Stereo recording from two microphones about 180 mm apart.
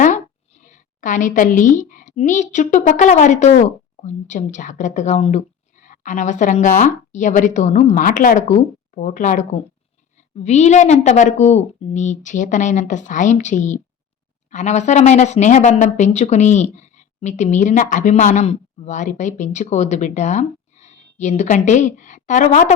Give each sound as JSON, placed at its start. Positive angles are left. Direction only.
{"t": 0.6, "sound": "a woman's voice", "side_deg": 45}